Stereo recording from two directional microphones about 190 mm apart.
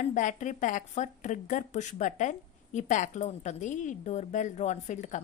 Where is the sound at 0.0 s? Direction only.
40° left (ahead or behind).